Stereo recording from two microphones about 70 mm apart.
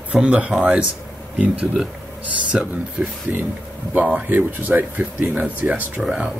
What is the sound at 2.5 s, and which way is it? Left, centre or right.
Speech, centre.